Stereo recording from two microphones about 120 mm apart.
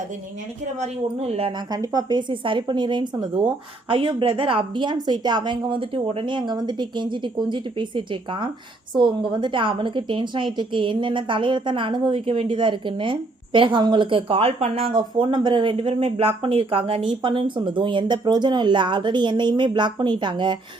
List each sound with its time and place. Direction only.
1.0 s speech: 55° right (ahead or behind)
1.7 s speech: 30° right (ahead or behind)
3.8 s a woman's voice: 50° right (ahead or behind)